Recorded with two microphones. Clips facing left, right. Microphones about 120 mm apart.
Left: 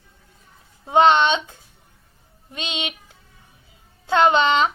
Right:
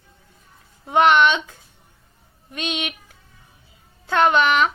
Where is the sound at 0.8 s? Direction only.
25° left (ahead or behind).